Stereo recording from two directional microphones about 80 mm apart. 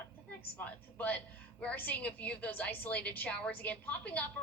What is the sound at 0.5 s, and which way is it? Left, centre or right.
A woman's voice, centre.